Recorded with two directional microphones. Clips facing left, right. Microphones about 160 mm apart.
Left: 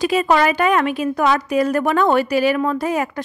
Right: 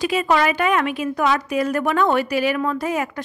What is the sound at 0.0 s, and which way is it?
A woman's voice, 40° left (ahead or behind).